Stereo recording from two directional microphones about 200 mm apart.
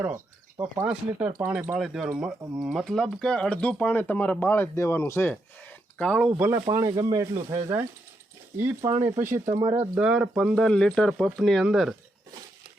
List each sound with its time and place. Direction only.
0.0 s speech: 10° right (ahead or behind)